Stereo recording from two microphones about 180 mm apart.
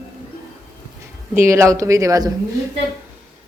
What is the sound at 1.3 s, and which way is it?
A woman's voice, 15° right (ahead or behind).